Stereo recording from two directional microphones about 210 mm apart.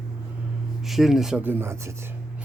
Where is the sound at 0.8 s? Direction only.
Centre (ahead or behind).